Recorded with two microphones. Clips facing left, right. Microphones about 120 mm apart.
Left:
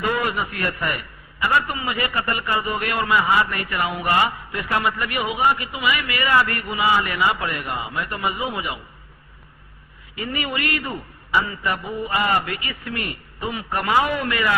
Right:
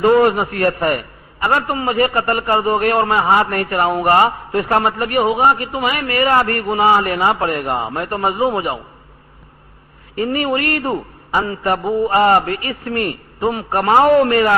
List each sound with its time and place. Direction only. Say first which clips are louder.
0.0 s a man's voice: right 11 dB; 40° right (ahead or behind)
10.2 s a man's voice: right 9 dB; 40° right (ahead or behind)